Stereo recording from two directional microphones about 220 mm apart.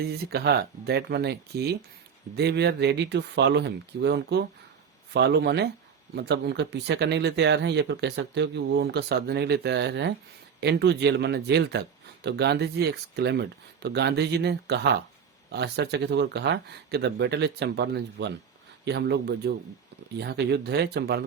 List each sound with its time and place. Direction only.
0.0 s speech: 45° right (ahead or behind)